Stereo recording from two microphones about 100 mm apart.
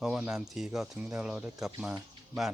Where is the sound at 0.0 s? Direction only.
5° right (ahead or behind).